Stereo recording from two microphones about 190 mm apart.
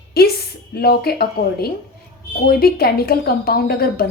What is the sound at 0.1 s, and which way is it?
A woman's voice, 55° left (ahead or behind).